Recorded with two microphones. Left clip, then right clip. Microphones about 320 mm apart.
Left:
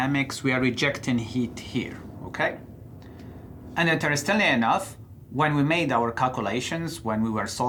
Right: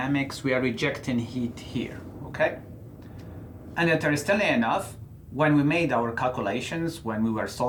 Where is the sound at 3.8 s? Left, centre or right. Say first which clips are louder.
Even; left.